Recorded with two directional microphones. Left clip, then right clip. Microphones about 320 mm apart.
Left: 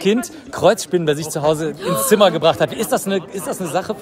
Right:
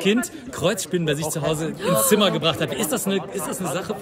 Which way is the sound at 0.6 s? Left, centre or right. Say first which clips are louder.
Left 8 dB; centre.